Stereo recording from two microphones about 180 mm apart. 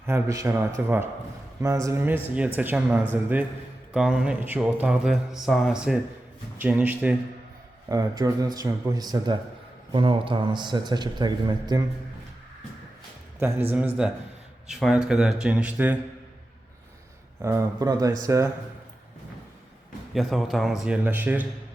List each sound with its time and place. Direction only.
0.0 s a man's voice: 15° right (ahead or behind)
7.9 s a man's voice: 20° right (ahead or behind)
13.7 s a man's voice: 10° right (ahead or behind)
17.4 s a man's voice: 15° right (ahead or behind)
20.1 s a man's voice: centre (ahead or behind)